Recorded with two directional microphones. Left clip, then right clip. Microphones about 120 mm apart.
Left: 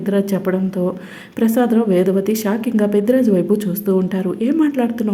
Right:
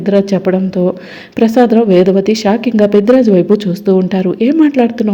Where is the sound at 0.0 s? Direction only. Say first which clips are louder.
Right 7 dB; 25° right (ahead or behind).